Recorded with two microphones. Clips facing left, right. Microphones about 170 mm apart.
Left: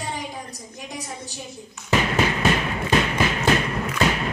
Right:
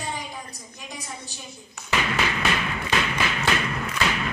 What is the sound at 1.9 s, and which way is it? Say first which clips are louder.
Music: left 4 dB; 40° left (ahead or behind).